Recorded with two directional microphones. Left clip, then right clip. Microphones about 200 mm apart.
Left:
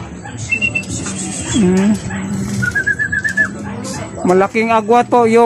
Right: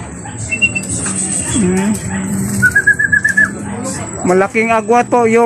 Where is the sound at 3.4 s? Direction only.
50° left (ahead or behind).